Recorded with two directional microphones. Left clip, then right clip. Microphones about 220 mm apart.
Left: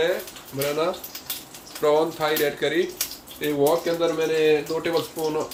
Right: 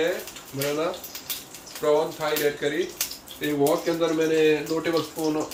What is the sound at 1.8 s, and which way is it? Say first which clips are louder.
Speech: left 2 dB; 35° left (ahead or behind).